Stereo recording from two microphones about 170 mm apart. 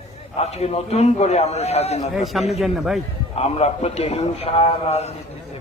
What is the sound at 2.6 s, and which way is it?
Speech, centre (ahead or behind).